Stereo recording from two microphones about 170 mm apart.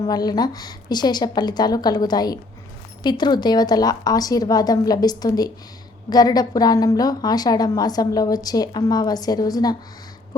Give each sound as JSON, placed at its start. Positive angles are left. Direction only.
{"t": 0.1, "sound": "a woman's voice", "side_deg": 25}